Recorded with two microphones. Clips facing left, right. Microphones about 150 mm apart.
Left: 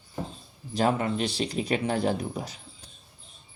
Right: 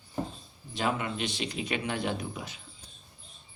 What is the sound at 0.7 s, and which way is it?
Speech, 40° left (ahead or behind).